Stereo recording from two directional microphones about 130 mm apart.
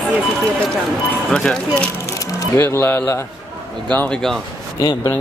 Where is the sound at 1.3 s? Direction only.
5° left (ahead or behind).